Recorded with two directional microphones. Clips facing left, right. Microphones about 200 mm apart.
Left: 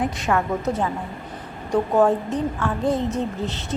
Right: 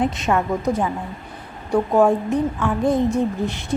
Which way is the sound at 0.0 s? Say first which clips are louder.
Right 2 dB; 20° right (ahead or behind).